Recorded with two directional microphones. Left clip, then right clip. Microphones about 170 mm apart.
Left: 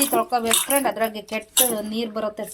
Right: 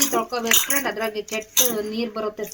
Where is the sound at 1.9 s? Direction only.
70° left (ahead or behind).